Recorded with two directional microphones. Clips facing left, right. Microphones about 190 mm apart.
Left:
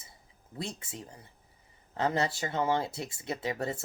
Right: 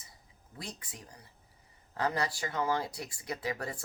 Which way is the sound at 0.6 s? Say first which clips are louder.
Left 6 dB; 25° left (ahead or behind).